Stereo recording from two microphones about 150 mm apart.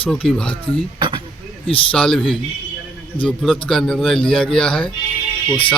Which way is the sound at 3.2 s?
Centre (ahead or behind).